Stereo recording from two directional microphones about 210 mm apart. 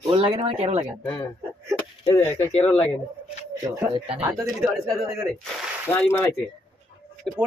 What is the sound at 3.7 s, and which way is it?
Speech, 20° right (ahead or behind).